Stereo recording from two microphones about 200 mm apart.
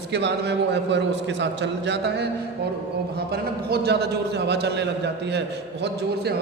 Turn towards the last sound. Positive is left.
turn(degrees=-55)  # may be behind; listen again after turning